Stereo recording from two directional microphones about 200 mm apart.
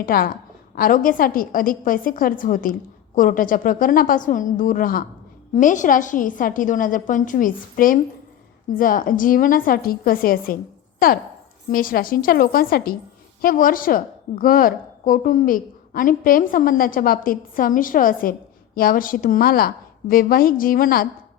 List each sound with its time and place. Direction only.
0.0 s a woman's voice: 45° left (ahead or behind)